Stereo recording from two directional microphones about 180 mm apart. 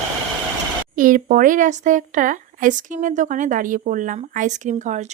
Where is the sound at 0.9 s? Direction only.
50° right (ahead or behind).